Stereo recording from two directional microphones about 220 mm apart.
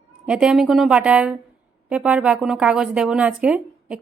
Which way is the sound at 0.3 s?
Centre (ahead or behind).